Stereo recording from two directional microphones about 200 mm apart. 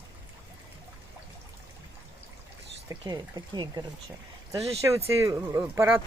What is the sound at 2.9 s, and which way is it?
Speech, 20° right (ahead or behind).